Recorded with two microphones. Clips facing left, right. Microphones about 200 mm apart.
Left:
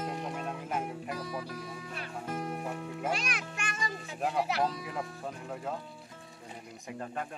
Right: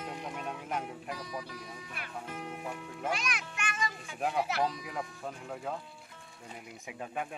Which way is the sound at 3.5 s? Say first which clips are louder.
Even; 30° left (ahead or behind).